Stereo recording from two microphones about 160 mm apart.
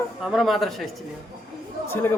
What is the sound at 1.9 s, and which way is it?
Speech, 15° left (ahead or behind).